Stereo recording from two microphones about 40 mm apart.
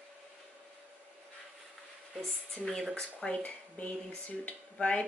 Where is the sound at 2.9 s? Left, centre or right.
Left.